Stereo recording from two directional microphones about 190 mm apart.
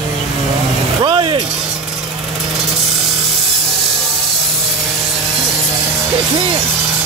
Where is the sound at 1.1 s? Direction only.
25° right (ahead or behind).